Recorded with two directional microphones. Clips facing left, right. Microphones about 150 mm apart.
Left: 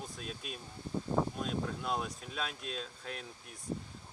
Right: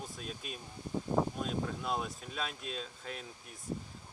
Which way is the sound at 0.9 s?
15° right (ahead or behind).